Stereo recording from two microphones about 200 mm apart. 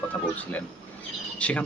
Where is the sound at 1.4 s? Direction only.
5° left (ahead or behind).